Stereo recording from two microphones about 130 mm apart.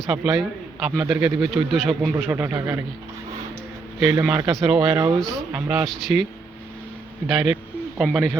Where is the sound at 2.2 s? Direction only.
15° right (ahead or behind).